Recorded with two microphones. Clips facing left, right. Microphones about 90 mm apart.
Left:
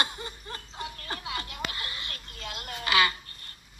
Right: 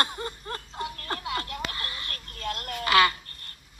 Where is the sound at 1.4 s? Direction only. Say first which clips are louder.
Right 2 dB; 15° left (ahead or behind).